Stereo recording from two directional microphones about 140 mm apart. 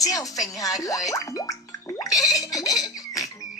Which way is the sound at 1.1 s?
25° left (ahead or behind).